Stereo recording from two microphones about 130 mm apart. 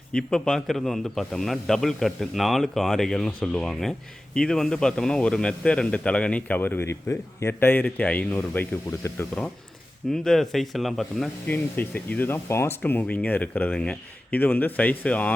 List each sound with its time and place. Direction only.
0.1 s a man's voice: 5° left (ahead or behind)
10.1 s a man's voice: centre (ahead or behind)
11.4 s a man's voice: 15° left (ahead or behind)